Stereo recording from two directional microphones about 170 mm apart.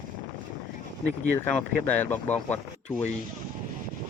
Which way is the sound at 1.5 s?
10° left (ahead or behind).